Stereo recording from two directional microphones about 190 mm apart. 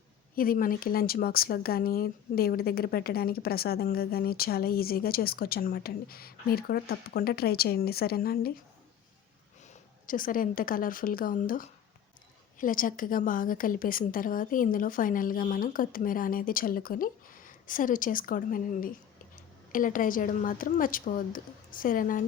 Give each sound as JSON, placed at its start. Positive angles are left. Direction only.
{"t": 0.3, "sound": "speech", "side_deg": 50}
{"t": 10.1, "sound": "speech", "side_deg": 45}